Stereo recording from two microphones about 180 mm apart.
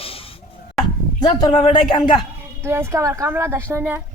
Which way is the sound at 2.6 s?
15° right (ahead or behind).